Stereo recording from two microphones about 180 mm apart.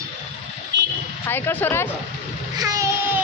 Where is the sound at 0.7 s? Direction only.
80° right.